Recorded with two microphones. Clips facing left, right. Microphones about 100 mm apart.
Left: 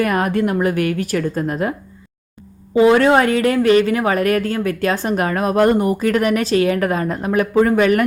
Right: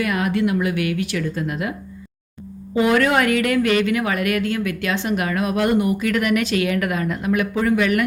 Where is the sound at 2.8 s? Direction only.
30° left (ahead or behind).